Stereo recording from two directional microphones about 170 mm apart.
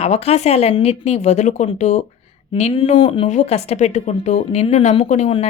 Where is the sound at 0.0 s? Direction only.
40° left (ahead or behind).